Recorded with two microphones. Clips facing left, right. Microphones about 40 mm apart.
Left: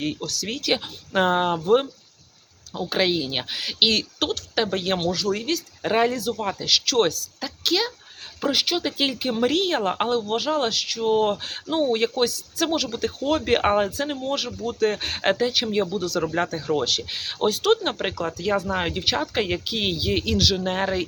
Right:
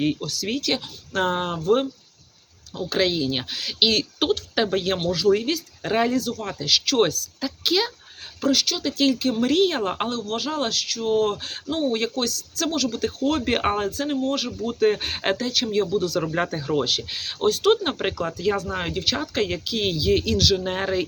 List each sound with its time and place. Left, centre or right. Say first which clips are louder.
0.0 s speech: right 3 dB; centre
0.7 s speech: left 2 dB; centre
4.2 s speech: right 2 dB; centre
5.8 s speech: even; centre
8.4 s speech: right 1 dB; centre
15.4 s speech: left 1 dB; centre